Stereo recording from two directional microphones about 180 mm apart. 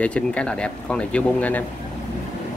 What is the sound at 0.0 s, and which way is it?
Speech, 5° left (ahead or behind).